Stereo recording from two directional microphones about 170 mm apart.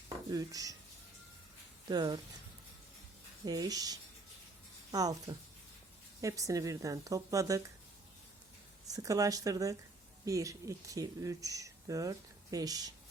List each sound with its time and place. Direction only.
0.3 s speech: 20° right (ahead or behind)
1.9 s speech: 25° right (ahead or behind)
3.4 s speech: 20° right (ahead or behind)
8.9 s speech: 20° right (ahead or behind)